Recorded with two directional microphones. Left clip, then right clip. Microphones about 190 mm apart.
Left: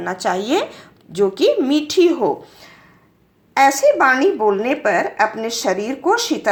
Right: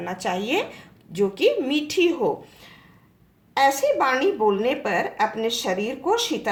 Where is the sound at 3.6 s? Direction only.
30° left (ahead or behind).